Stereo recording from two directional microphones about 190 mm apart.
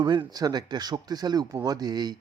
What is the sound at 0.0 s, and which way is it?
Speech, 25° right (ahead or behind).